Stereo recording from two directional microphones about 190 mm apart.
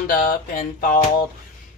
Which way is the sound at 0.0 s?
50° left (ahead or behind).